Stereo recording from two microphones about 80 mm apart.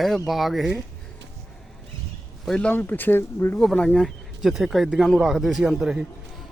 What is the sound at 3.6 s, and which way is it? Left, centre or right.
Speech, centre.